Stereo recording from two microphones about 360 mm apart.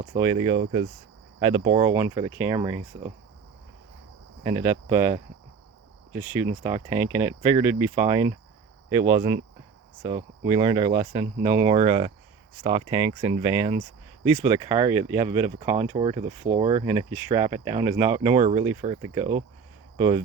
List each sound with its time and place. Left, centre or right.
0.0 s speech: centre
4.4 s speech: centre
6.4 s speech: centre